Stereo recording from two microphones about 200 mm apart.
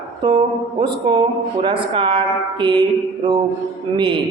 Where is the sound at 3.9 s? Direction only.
25° right (ahead or behind).